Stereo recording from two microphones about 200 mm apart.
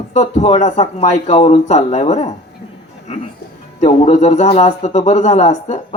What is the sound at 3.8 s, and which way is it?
Speech, 35° left (ahead or behind).